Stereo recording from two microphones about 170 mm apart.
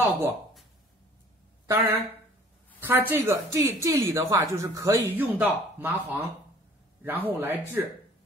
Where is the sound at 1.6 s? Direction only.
15° right (ahead or behind).